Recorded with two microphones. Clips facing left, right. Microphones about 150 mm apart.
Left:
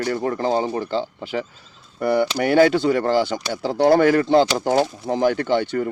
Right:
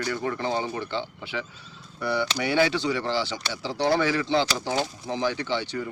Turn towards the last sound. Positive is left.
turn(degrees=50)  # may be behind; listen again after turning